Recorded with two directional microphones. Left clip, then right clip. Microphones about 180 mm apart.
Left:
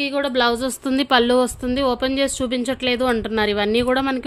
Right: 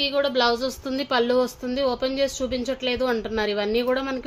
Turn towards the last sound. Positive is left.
turn(degrees=60)  # may be behind; listen again after turning